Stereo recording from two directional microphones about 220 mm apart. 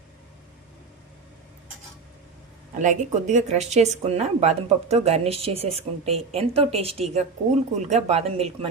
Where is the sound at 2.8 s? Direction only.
35° right (ahead or behind).